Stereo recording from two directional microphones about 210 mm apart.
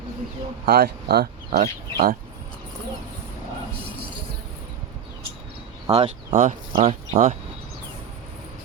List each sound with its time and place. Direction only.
0.6 s speech: 45° right (ahead or behind)
5.9 s speech: 30° right (ahead or behind)